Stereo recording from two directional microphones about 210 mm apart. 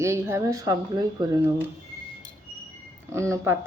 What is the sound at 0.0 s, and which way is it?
Speech, 15° right (ahead or behind).